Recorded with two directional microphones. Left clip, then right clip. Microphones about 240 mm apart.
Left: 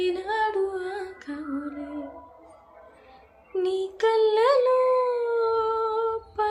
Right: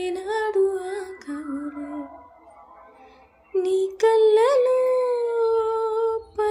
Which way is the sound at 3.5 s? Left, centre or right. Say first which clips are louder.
Right 4 dB; right.